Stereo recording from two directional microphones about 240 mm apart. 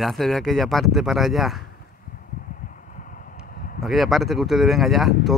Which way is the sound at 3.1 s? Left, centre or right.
Left.